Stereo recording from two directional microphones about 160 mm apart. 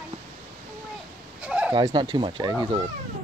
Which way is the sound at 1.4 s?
5° right (ahead or behind).